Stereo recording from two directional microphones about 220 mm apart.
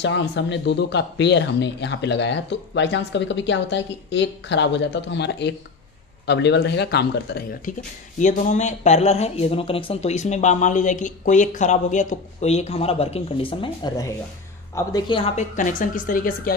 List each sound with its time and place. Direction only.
0.0 s speech: 55° left (ahead or behind)
8.2 s speech: 35° left (ahead or behind); by 15.2 s 20° left (ahead or behind)
15.3 s speech: 35° left (ahead or behind)